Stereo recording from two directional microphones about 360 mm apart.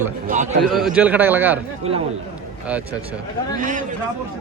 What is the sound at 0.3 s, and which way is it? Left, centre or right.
Speech, right.